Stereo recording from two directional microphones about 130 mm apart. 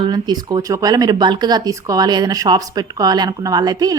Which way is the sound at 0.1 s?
30° right (ahead or behind).